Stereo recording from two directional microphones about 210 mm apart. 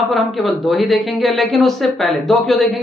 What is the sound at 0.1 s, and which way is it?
Speech, centre (ahead or behind).